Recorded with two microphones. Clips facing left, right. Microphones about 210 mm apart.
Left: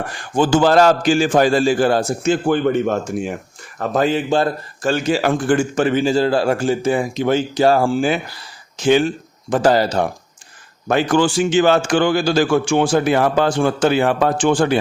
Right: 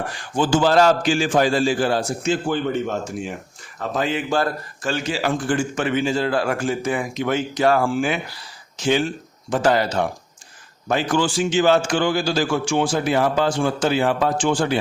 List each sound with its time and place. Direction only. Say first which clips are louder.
0.3 s a man's voice: left 3 dB; 55° left (ahead or behind)
3.8 s a man's voice: left 6 dB; 40° left (ahead or behind)
4.3 s a man's voice: left 4 dB; 25° left (ahead or behind)
4.8 s a man's voice: left 6 dB; 40° left (ahead or behind)
5.7 s a man's voice: left 5 dB; 35° left (ahead or behind)
8.8 s a man's voice: left 5 dB; 55° left (ahead or behind)
9.6 s a man's voice: left 4 dB; 35° left (ahead or behind)
10.8 s a man's voice: left 5 dB; 55° left (ahead or behind)